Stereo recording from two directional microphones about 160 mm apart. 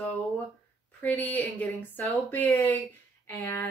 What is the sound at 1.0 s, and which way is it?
A woman's voice, 10° left (ahead or behind).